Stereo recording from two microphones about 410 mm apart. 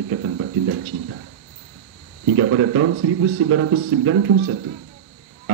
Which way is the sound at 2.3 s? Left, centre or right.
Right.